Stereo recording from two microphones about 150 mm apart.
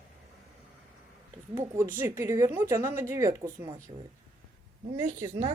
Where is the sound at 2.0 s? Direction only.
20° right (ahead or behind).